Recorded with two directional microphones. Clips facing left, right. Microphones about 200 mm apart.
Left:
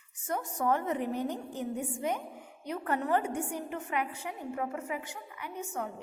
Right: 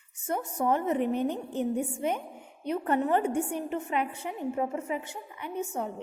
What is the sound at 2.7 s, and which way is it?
A woman's voice, 20° right (ahead or behind).